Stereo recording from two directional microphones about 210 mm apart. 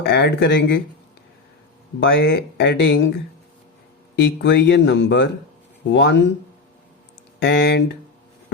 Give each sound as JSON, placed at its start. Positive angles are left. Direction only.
{"t": 0.0, "sound": "speech", "side_deg": 50}
{"t": 2.0, "sound": "speech", "side_deg": 55}
{"t": 4.1, "sound": "speech", "side_deg": 55}
{"t": 7.3, "sound": "speech", "side_deg": 55}